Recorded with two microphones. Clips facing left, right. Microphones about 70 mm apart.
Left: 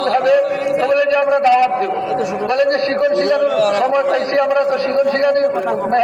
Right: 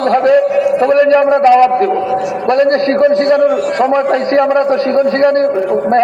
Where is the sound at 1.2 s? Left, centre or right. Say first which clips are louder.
Right 5 dB; right.